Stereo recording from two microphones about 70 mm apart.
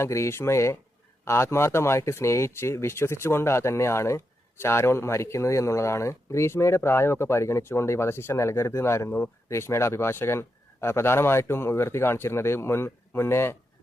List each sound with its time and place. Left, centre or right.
0.0 s speech: left